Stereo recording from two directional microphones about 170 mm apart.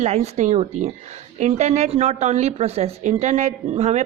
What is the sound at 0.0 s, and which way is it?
Speech, 40° right (ahead or behind).